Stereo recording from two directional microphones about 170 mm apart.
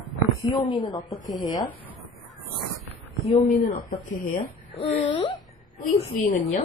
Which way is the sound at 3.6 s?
55° left (ahead or behind).